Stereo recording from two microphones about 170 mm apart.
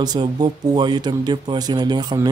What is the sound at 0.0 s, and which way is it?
Speech, 25° right (ahead or behind).